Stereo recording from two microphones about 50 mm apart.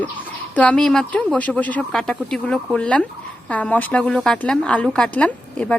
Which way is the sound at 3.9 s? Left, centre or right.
Centre.